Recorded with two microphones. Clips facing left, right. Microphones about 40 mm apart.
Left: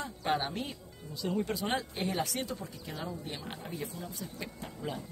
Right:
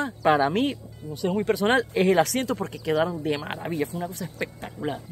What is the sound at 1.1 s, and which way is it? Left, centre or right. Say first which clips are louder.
Speech: right 9 dB; right.